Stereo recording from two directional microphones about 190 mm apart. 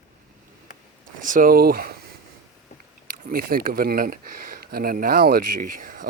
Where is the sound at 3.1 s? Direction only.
50° right (ahead or behind).